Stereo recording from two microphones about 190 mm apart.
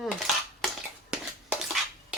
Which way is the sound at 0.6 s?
5° right (ahead or behind).